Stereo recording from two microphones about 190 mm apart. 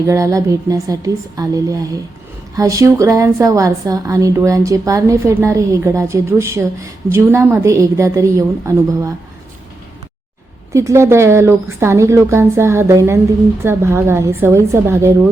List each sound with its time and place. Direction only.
0.1 s a woman's voice: 15° right (ahead or behind)
10.7 s a woman's voice: 15° right (ahead or behind)